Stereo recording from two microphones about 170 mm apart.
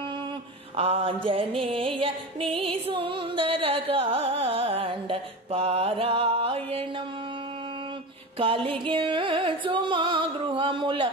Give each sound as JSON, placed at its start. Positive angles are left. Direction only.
{"t": 0.7, "sound": "mantra", "side_deg": -35}
{"t": 2.0, "sound": "music", "side_deg": -30}
{"t": 8.4, "sound": "music", "side_deg": -30}